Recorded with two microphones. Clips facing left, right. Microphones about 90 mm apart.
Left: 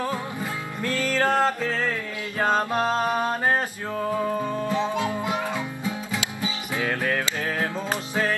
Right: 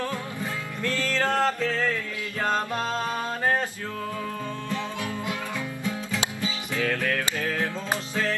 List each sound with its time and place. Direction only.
0.0 s music: 15° left (ahead or behind)
4.6 s music: 20° left (ahead or behind)